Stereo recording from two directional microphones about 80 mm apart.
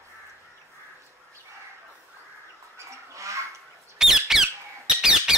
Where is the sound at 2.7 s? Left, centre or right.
Right.